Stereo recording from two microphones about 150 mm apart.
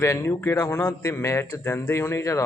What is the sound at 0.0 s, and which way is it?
Speech, 20° left (ahead or behind).